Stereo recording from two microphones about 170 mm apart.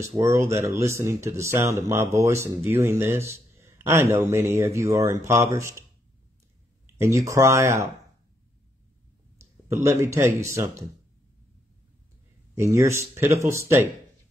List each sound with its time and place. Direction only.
0.2 s speech: 15° right (ahead or behind)
7.0 s speech: 20° right (ahead or behind)
9.4 s speech: 15° right (ahead or behind)
12.5 s speech: 15° right (ahead or behind)